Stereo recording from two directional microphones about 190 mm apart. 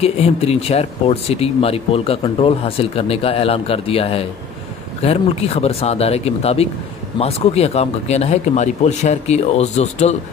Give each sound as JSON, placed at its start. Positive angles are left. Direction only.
{"t": 0.0, "sound": "speech", "side_deg": 35}